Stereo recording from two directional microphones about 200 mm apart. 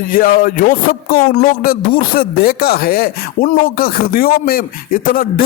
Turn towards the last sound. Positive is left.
turn(degrees=45)  # may be behind; listen again after turning